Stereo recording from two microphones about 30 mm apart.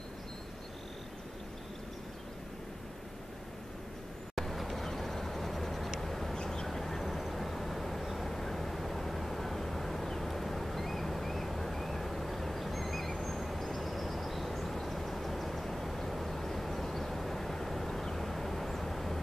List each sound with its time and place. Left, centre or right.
4.4 s vehicle: centre
6.3 s a sound: left
6.8 s vehicle: centre